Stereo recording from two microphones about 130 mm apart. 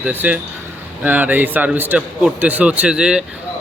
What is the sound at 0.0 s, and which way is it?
A man's voice, 10° right (ahead or behind).